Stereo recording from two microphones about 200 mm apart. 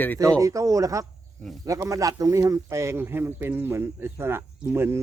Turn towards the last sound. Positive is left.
turn(degrees=-10)  # may be behind; listen again after turning